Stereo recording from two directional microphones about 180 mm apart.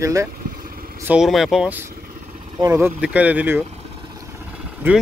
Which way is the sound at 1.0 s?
5° right (ahead or behind).